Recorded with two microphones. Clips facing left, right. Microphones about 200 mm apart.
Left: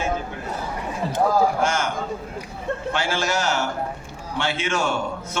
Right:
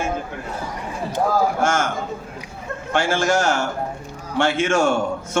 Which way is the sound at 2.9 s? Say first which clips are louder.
Right 7 dB; 50° right (ahead or behind).